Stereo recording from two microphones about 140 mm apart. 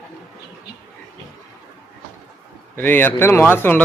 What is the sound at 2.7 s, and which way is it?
A man's voice, 15° left (ahead or behind).